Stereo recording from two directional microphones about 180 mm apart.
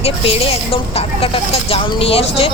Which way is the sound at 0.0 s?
30° left (ahead or behind).